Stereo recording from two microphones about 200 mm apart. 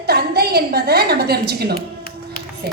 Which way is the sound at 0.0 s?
50° right (ahead or behind).